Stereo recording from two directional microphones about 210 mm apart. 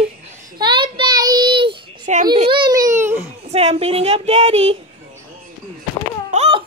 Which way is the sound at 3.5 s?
30° right (ahead or behind).